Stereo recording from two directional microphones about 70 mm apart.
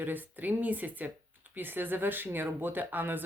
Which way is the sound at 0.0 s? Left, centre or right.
Right.